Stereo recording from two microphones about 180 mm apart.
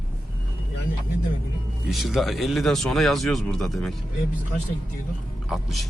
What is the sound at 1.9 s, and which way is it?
Speech, centre (ahead or behind).